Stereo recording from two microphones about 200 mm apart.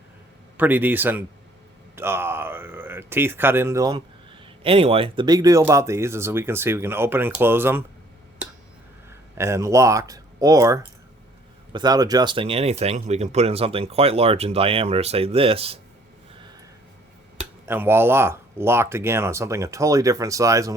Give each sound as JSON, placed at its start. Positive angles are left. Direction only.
{"t": 0.5, "sound": "speech", "side_deg": -10}
{"t": 9.0, "sound": "speech", "side_deg": -15}
{"t": 17.7, "sound": "speech", "side_deg": -10}